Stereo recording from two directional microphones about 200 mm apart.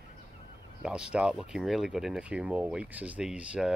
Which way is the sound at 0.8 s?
5° right (ahead or behind).